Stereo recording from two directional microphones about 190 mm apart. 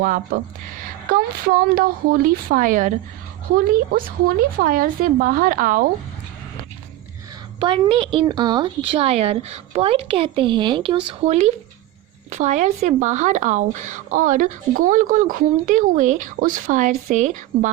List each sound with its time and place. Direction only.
0.0 s a woman's voice: 45° right (ahead or behind)
7.6 s a woman's voice: 25° right (ahead or behind)